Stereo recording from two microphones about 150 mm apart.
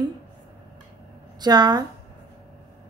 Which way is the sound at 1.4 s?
25° right (ahead or behind).